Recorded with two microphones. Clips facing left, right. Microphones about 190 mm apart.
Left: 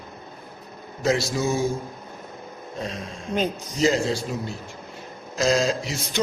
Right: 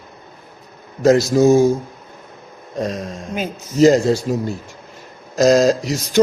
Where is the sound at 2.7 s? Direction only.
45° right (ahead or behind).